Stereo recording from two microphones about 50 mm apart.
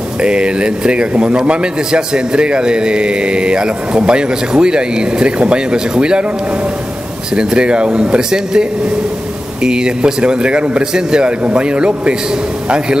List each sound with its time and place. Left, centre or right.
0.2 s a man's voice: centre
7.3 s a man's voice: centre